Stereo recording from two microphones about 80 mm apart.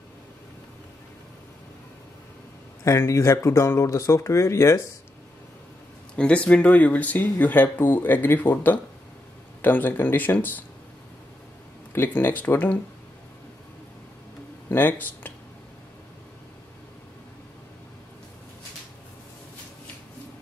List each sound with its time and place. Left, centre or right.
2.8 s speech: left
6.1 s speech: centre
11.9 s speech: left
14.7 s speech: left